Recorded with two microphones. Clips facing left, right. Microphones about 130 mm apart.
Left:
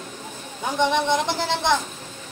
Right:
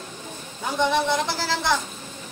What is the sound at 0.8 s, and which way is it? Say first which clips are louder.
Speech: left 1 dB; 20° left (ahead or behind).